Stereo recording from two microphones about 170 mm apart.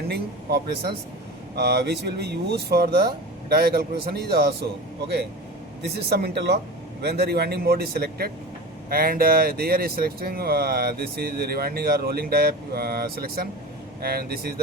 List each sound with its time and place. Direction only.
0.1 s speech: 70° right (ahead or behind)
5.8 s speech: 70° right (ahead or behind)